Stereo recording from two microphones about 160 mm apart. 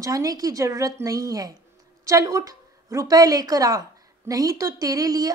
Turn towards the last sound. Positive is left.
turn(degrees=-25)  # may be behind; listen again after turning